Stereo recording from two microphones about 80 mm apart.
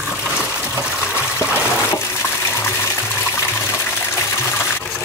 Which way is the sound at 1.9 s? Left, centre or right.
Left.